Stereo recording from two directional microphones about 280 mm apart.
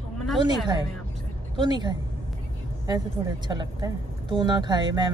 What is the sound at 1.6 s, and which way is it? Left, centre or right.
Speech, centre.